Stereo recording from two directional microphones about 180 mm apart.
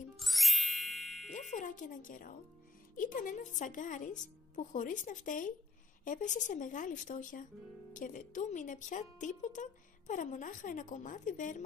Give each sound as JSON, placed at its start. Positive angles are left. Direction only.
{"t": 0.2, "sound": "ding", "side_deg": 0}
{"t": 1.3, "sound": "speech", "side_deg": 45}